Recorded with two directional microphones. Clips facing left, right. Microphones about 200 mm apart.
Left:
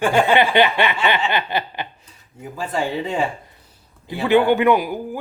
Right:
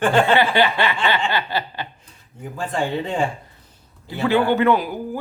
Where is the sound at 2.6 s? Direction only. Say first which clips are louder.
Even; 10° left (ahead or behind).